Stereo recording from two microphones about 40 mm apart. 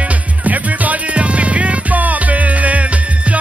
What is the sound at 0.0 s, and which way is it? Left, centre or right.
Music, right.